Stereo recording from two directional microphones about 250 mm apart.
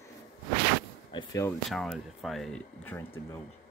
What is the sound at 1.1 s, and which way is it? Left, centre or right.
Speech, centre.